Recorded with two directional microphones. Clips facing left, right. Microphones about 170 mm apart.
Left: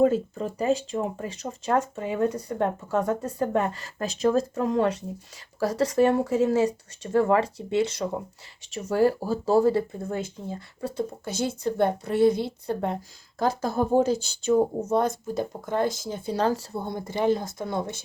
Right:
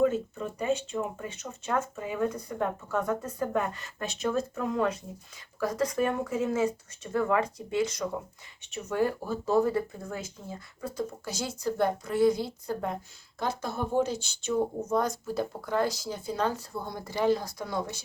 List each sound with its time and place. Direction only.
0.0 s speech: 35° left (ahead or behind)
11.3 s speech: 55° left (ahead or behind)
11.6 s speech: 25° left (ahead or behind)
13.4 s speech: 40° left (ahead or behind); by 17.8 s 25° left (ahead or behind)